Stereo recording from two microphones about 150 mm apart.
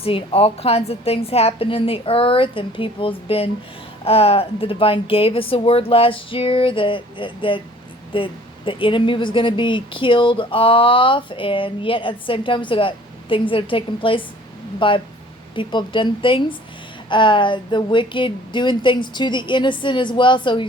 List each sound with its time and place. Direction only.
0.0 s a woman's voice: 40° left (ahead or behind)